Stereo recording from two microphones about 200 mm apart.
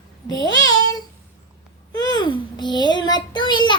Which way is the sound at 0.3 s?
20° left (ahead or behind).